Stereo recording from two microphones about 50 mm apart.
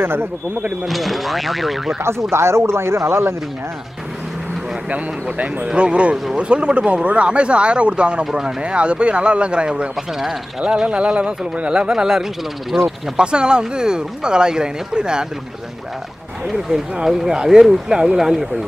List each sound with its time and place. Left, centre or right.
0.0 s speech: right
0.8 s speech: centre
2.3 s a man's voice: right
4.9 s speech: right; by 12.3 s centre
12.7 s speech: centre
13.1 s speech: centre
16.9 s speech: centre